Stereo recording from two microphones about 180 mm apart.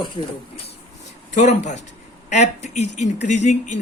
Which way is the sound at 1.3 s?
40° left (ahead or behind).